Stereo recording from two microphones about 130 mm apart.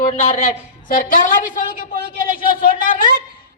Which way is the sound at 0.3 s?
60° left (ahead or behind).